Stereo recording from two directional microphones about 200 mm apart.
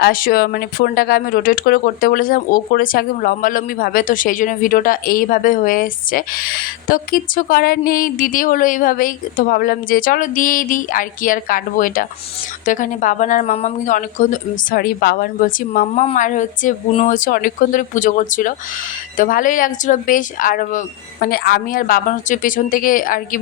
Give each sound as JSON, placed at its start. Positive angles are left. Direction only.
{"t": 0.0, "sound": "a woman's voice", "side_deg": 45}
{"t": 15.9, "sound": "a woman's voice", "side_deg": 35}